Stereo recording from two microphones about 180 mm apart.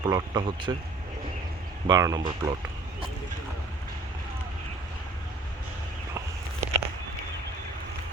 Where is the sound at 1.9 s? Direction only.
20° right (ahead or behind).